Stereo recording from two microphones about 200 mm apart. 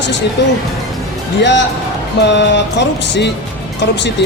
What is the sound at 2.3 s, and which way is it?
Speech, 60° left (ahead or behind).